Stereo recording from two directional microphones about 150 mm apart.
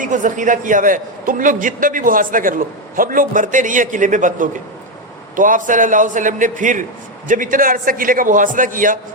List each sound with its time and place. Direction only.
0.0 s a man's voice: 60° right (ahead or behind)